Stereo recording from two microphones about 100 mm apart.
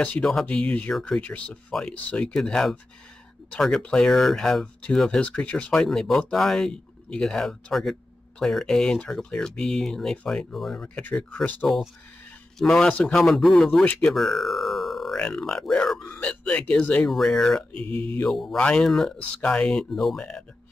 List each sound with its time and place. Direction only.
0.0 s speech: 5° left (ahead or behind)
0.5 s speech: 15° left (ahead or behind)
17.7 s mantra: 70° right (ahead or behind)
18.2 s speech: 5° left (ahead or behind)